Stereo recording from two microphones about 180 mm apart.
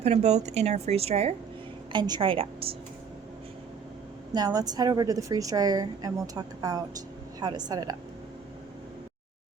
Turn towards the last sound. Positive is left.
turn(degrees=-20)  # may be behind; listen again after turning